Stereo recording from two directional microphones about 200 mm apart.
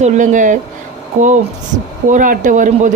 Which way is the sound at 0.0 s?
35° right (ahead or behind).